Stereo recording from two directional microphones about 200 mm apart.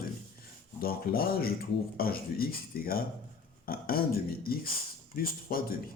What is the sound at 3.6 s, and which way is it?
Speech, 45° left (ahead or behind).